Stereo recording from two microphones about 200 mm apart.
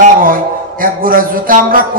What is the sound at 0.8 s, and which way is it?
Music, 45° right (ahead or behind).